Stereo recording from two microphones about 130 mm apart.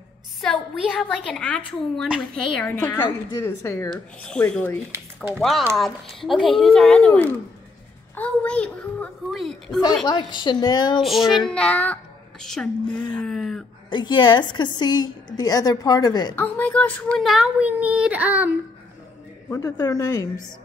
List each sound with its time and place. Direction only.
0.4 s a woman's voice: 5° left (ahead or behind); by 3.9 s 20° left (ahead or behind)
3.9 s a woman's voice: 5° left (ahead or behind)
4.9 s speech: 15° right (ahead or behind)
6.2 s a child's voice: centre (ahead or behind)
10.0 s a woman's voice: 35° left (ahead or behind)
11.0 s a child's voice: centre (ahead or behind)
13.8 s a woman's voice: 35° left (ahead or behind)
16.3 s a woman's voice: 15° left (ahead or behind)
17.3 s speech: 5° right (ahead or behind)
19.5 s speech: 25° left (ahead or behind)